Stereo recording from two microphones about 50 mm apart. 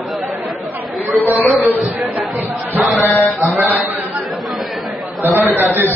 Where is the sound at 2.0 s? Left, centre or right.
Centre.